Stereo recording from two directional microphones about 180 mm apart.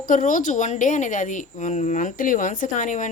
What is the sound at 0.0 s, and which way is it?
Speech, 45° left (ahead or behind).